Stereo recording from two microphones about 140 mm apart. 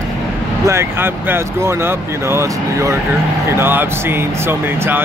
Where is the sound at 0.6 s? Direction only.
15° right (ahead or behind).